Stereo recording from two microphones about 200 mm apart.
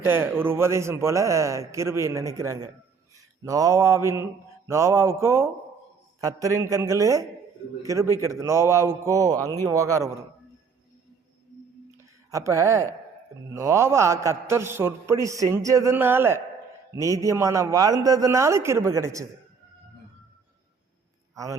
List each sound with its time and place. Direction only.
0.0 s a man's voice: 10° right (ahead or behind)
11.9 s a sound: 15° right (ahead or behind)
13.5 s a man's voice: 15° right (ahead or behind)